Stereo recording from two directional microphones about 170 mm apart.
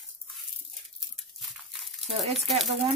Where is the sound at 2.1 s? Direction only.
35° right (ahead or behind).